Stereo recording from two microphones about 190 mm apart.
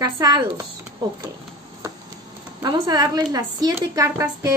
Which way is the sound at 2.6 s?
20° right (ahead or behind).